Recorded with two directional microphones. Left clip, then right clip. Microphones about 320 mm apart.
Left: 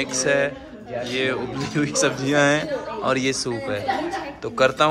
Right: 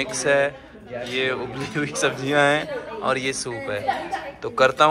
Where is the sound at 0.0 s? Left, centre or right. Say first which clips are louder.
Right 1 dB; centre.